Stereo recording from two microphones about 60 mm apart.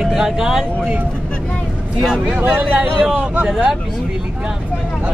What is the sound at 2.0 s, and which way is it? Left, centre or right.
Speech, centre.